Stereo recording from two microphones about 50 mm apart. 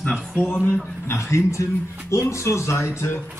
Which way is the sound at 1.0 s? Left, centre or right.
Left.